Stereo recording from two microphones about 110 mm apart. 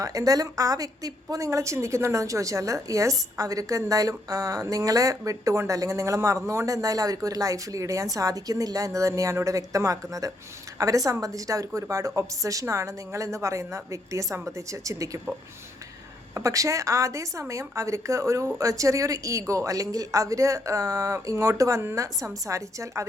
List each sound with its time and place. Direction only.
0.0 s speech: 30° right (ahead or behind)
16.3 s speech: 30° right (ahead or behind)